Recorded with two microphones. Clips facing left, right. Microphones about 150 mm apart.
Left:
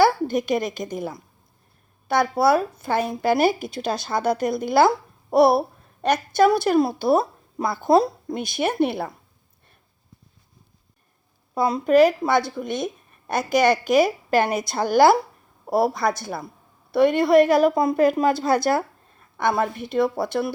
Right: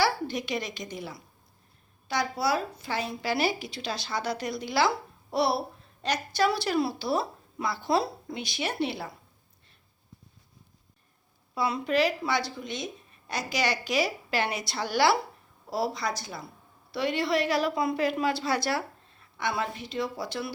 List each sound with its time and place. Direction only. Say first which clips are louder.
0.0 s a woman's voice: left 9 dB; 50° left (ahead or behind)
11.5 s a woman's voice: left 9 dB; 45° left (ahead or behind)